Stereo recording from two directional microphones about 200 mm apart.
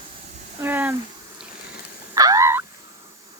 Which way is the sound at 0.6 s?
10° right (ahead or behind).